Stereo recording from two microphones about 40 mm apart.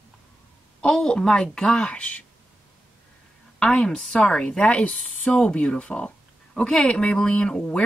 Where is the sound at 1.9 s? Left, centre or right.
Left.